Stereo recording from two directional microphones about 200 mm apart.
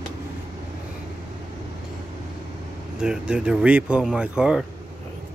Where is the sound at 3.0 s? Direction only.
5° right (ahead or behind).